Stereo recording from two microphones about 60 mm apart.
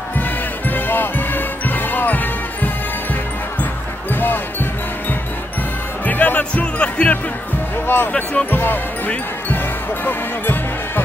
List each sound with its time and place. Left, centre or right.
0.1 s music: left
4.1 s basketball bounce: left
6.0 s music: left
7.7 s music: left
8.1 s speech: centre
8.5 s speech: left
9.5 s basketball bounce: left